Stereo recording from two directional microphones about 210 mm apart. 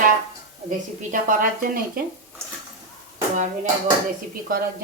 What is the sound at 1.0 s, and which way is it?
A woman's voice, 40° right (ahead or behind).